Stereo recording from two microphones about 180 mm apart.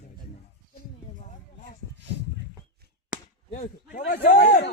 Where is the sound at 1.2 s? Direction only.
45° left (ahead or behind).